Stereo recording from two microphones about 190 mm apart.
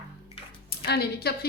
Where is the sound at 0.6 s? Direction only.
60° left (ahead or behind).